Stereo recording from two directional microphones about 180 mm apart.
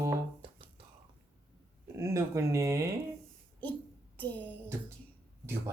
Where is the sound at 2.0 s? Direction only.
15° right (ahead or behind).